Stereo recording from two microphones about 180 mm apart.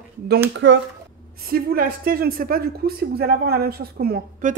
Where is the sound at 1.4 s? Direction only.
55° right (ahead or behind).